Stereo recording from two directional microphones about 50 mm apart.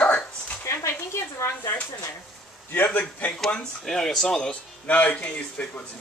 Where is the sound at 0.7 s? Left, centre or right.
Left.